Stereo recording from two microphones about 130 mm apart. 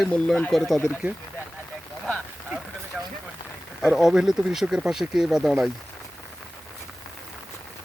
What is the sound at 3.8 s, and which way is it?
Speech, 5° right (ahead or behind).